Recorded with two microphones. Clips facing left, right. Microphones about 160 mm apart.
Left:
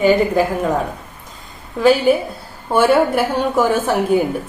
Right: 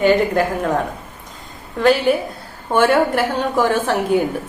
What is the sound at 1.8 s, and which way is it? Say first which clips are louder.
A woman's voice: left 2 dB; 5° left (ahead or behind).